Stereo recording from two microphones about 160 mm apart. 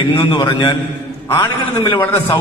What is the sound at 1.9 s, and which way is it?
Speech, 15° left (ahead or behind).